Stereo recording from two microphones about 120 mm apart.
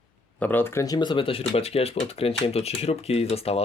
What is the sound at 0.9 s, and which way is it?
Speech, 40° left (ahead or behind).